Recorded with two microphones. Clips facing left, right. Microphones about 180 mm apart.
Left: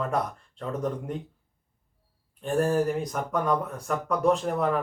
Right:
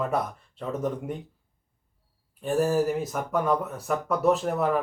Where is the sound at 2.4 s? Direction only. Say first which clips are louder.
Right 1 dB; 5° right (ahead or behind).